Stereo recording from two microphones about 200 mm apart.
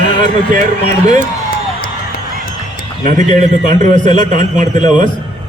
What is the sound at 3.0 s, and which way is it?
A man's voice, 40° right (ahead or behind).